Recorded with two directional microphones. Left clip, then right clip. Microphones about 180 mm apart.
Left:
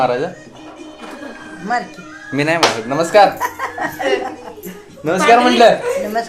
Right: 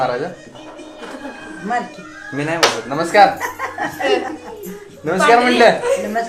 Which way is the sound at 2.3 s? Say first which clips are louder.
Left 2 dB; 55° left (ahead or behind).